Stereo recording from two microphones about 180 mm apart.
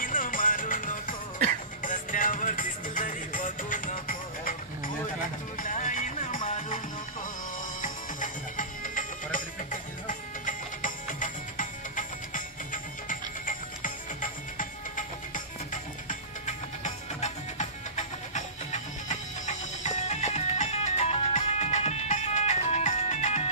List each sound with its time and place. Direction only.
0.0 s music: 50° left (ahead or behind)
7.8 s music: 45° left (ahead or behind)